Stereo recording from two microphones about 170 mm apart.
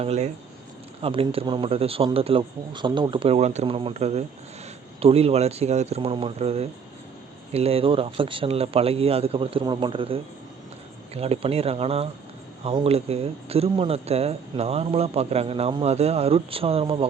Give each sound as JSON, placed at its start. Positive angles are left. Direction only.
{"t": 0.0, "sound": "speech", "side_deg": -40}